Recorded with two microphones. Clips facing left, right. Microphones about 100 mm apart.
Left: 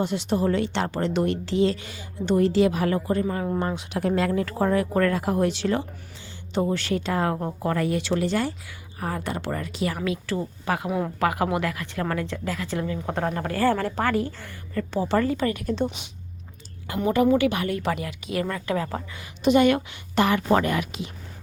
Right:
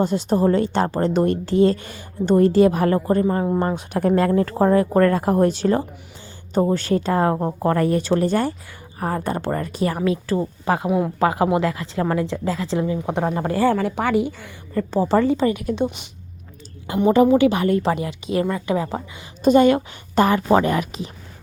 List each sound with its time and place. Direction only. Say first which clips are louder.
0.0 s a woman's voice: right 5 dB; 40° right (ahead or behind)
10.8 s a woman's voice: right 7 dB; 10° right (ahead or behind)
11.2 s a woman's voice: right 5 dB; 25° right (ahead or behind)
13.7 s a woman's voice: right 2 dB; 5° right (ahead or behind)
14.1 s a woman's voice: right 5 dB; 15° right (ahead or behind)
14.8 s a woman's voice: right 5 dB; 35° right (ahead or behind)
15.2 s a woman's voice: right 5 dB; 20° right (ahead or behind)
16.8 s a woman's voice: right 6 dB; 25° right (ahead or behind)
19.4 s a woman's voice: right 4 dB; 40° right (ahead or behind)